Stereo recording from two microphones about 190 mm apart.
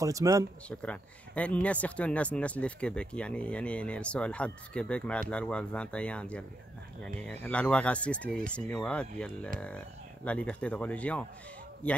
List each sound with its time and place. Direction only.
0.0 s speech: 15° right (ahead or behind)
0.7 s speech: 5° left (ahead or behind)